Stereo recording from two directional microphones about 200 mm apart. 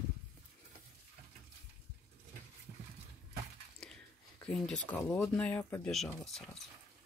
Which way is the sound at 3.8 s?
5° left (ahead or behind).